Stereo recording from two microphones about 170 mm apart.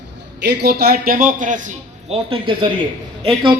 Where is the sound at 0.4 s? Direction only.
75° right (ahead or behind).